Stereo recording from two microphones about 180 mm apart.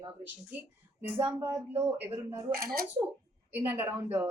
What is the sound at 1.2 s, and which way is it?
A woman's voice, 15° right (ahead or behind).